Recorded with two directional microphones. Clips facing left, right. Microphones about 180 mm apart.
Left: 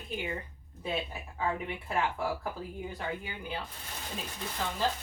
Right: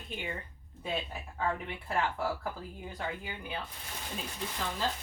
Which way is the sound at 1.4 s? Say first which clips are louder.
Left 1 dB; 5° left (ahead or behind).